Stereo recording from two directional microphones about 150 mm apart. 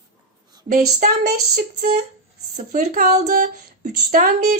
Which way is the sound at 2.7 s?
65° right (ahead or behind).